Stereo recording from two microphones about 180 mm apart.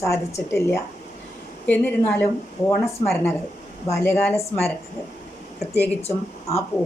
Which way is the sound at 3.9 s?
10° left (ahead or behind).